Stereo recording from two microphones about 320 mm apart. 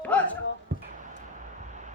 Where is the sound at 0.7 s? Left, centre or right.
Right.